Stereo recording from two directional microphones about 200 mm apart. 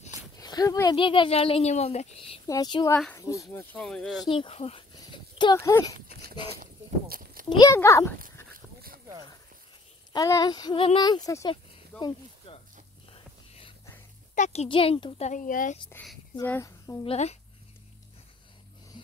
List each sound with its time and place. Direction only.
0.4 s speech: 20° left (ahead or behind)
2.4 s a child's voice: 20° left (ahead or behind)
3.7 s speech: 5° left (ahead or behind)
4.3 s speech: 30° left (ahead or behind)
6.5 s a sound: 45° right (ahead or behind)
7.4 s a child's voice: 20° left (ahead or behind)
8.5 s dog: 45° right (ahead or behind)
10.1 s speech: 20° left (ahead or behind)
12.0 s a sound: 25° left (ahead or behind)
13.1 s whispering: 25° left (ahead or behind)
14.3 s a child's voice: 35° left (ahead or behind)
15.9 s speech: 5° left (ahead or behind)
17.0 s a child's voice: 30° left (ahead or behind)